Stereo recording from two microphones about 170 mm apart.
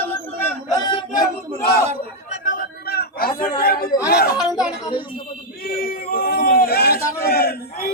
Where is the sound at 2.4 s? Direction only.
50° left (ahead or behind).